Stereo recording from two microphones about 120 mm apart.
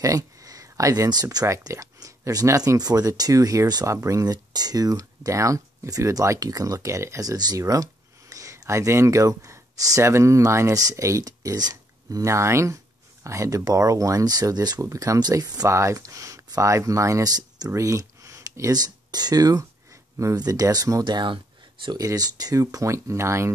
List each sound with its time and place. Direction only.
0.0 s speech: 30° right (ahead or behind)